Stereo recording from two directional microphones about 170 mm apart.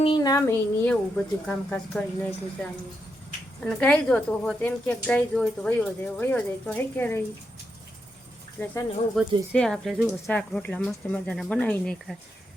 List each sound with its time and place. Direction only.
0.2 s speech: 20° left (ahead or behind)
8.6 s speech: 15° left (ahead or behind)
9.2 s speech: centre (ahead or behind)